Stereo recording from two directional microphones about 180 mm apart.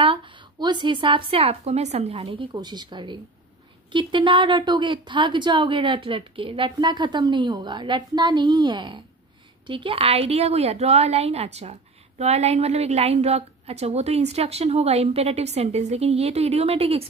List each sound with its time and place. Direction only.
0.0 s a woman's voice: 30° right (ahead or behind)